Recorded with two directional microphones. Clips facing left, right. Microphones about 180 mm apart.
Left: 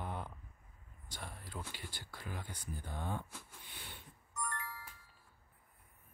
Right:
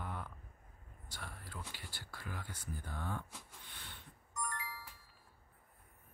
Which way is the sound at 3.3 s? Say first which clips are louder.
Left 1 dB; centre (ahead or behind).